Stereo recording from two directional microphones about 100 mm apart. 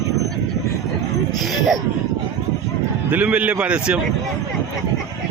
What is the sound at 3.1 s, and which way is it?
Speech, 15° right (ahead or behind).